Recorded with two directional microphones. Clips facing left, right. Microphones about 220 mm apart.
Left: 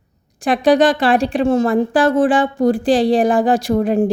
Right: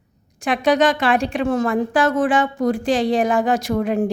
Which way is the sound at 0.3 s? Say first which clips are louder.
Left 4 dB; 35° left (ahead or behind).